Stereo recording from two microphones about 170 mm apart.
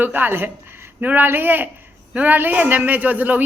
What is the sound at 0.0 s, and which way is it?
A woman's voice, 10° right (ahead or behind).